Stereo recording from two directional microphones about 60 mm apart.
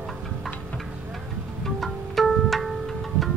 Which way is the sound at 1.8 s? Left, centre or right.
Centre.